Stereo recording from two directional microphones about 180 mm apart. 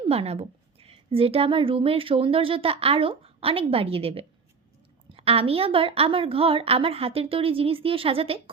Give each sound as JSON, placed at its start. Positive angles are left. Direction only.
{"t": 0.0, "sound": "a woman's voice", "side_deg": -35}